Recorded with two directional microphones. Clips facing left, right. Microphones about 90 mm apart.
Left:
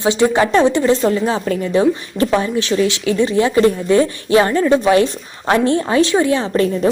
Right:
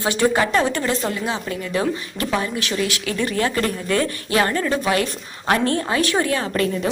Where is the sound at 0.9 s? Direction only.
35° left (ahead or behind).